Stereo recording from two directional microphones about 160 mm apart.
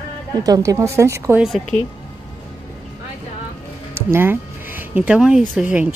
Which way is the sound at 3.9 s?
15° right (ahead or behind).